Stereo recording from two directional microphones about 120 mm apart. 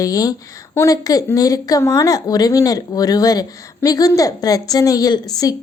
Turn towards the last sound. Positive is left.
turn(degrees=30)  # may be behind; listen again after turning